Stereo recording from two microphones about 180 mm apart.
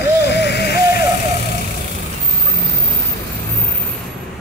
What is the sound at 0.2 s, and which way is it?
Sheep, 70° left (ahead or behind).